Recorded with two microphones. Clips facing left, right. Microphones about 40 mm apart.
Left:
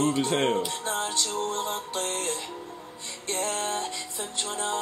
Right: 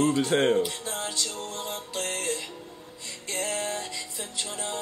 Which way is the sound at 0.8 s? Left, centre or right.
Left.